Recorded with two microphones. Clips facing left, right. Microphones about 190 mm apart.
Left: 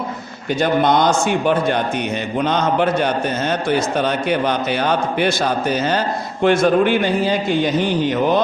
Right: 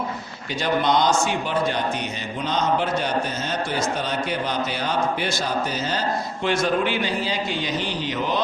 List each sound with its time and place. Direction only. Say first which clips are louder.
0.6 s a man's voice: left 5 dB; 55° left (ahead or behind)